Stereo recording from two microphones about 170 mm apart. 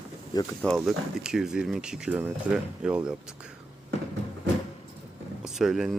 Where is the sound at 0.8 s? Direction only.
5° right (ahead or behind).